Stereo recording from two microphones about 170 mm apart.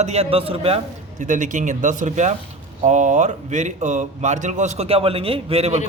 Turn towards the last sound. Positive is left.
turn(degrees=-40)  # may be behind; listen again after turning